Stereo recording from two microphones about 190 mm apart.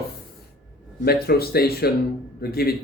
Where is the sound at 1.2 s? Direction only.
55° left (ahead or behind).